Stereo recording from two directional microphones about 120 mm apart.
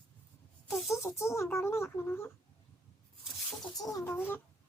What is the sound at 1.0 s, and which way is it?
Speech, 25° left (ahead or behind).